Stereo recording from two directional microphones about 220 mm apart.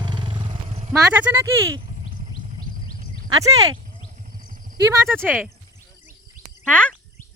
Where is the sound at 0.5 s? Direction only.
30° right (ahead or behind).